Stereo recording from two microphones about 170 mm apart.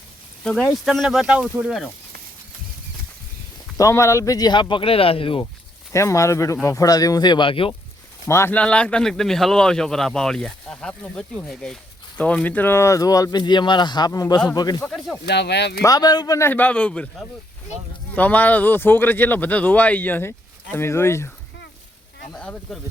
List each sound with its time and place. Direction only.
0.4 s speech: 5° left (ahead or behind)
3.8 s speech: 15° left (ahead or behind)
5.9 s speech: 15° left (ahead or behind)
8.3 s speech: 15° left (ahead or behind)
14.8 s speech: 5° left (ahead or behind)
15.3 s speech: 90° left
15.8 s speech: 20° left (ahead or behind)
22.4 s speech: 5° left (ahead or behind)